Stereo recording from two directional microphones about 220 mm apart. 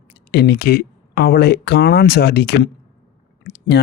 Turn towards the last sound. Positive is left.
turn(degrees=50)  # may be behind; listen again after turning